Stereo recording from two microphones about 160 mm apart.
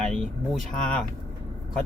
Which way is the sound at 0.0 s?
Centre (ahead or behind).